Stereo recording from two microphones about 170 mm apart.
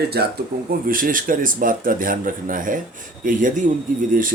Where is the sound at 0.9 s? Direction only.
55° right (ahead or behind).